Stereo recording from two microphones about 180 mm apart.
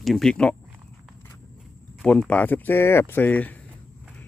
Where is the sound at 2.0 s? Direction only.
5° left (ahead or behind).